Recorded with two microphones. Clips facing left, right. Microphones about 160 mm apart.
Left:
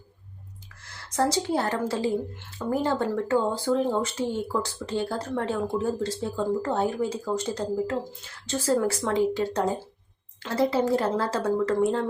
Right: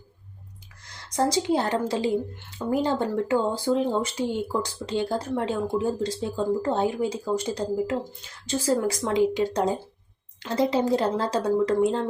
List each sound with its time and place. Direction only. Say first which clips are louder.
0.9 s a woman's voice: right 1 dB; 15° right (ahead or behind)